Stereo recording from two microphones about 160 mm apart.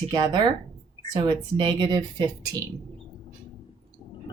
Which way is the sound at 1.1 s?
30° right (ahead or behind).